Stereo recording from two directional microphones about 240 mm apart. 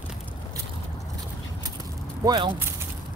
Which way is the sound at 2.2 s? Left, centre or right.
Centre.